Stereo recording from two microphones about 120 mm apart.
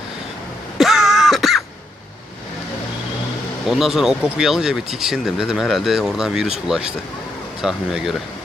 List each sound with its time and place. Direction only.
0.8 s throat clearing: centre (ahead or behind)
3.7 s speech: centre (ahead or behind)